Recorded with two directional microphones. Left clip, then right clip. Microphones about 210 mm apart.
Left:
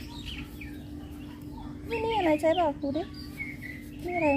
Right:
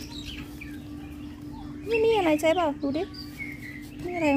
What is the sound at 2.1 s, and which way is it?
Speech, 40° right (ahead or behind).